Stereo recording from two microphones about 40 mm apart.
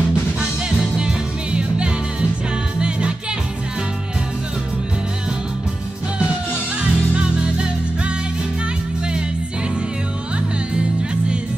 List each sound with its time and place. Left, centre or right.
0.9 s music: right
6.8 s music: right
10.7 s music: right